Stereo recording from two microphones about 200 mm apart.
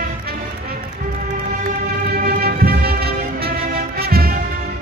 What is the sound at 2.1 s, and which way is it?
Music, 50° right (ahead or behind).